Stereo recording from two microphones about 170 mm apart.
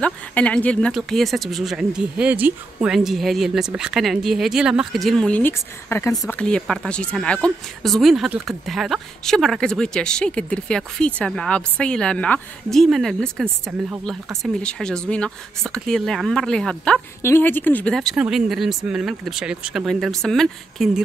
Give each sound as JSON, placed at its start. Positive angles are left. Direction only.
{"t": 0.0, "sound": "speech", "side_deg": 10}